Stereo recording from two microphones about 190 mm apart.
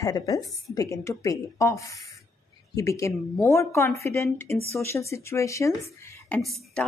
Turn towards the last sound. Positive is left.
turn(degrees=0)  # may be behind; listen again after turning